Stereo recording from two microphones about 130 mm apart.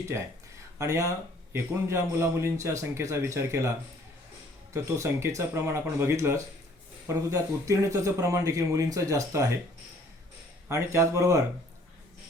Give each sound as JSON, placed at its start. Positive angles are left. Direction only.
{"t": 0.8, "sound": "speech", "side_deg": -25}
{"t": 4.7, "sound": "speech", "side_deg": -25}
{"t": 10.7, "sound": "speech", "side_deg": -20}